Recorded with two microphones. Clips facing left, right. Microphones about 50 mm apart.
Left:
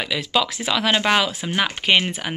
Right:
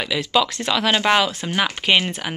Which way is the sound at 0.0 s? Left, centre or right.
Centre.